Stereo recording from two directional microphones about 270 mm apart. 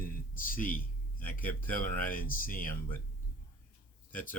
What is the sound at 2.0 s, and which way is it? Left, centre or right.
Speech, left.